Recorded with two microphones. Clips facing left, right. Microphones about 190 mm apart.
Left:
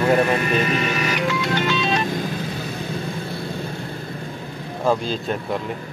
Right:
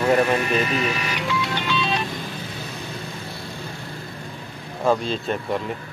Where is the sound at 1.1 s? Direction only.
45° left (ahead or behind).